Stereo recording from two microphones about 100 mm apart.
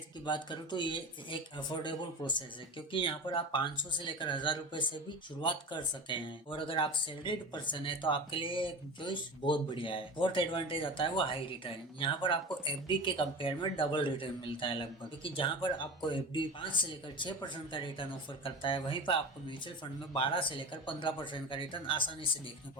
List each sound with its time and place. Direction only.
0.3 s speech: 50° left (ahead or behind)